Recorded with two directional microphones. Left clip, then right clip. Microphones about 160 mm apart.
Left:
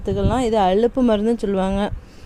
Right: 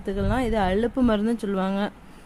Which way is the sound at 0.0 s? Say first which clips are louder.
Left 5 dB; 25° left (ahead or behind).